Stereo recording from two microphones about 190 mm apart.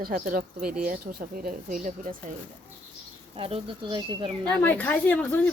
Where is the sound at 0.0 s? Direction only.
50° right (ahead or behind).